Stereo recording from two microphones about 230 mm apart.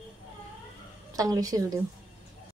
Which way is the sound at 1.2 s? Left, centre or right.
Centre.